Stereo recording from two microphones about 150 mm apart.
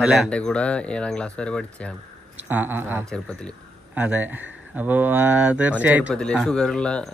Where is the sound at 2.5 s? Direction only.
15° right (ahead or behind).